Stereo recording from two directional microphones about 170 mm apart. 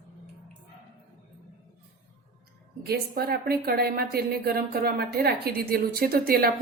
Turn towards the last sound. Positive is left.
turn(degrees=-60)  # may be behind; listen again after turning